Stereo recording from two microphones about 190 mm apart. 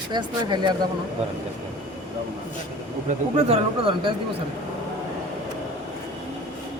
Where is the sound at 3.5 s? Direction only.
30° right (ahead or behind).